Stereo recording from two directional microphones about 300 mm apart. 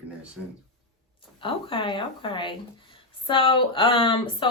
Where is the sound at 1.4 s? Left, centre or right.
Centre.